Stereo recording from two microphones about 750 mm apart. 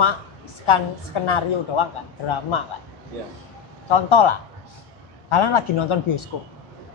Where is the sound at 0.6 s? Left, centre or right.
Left.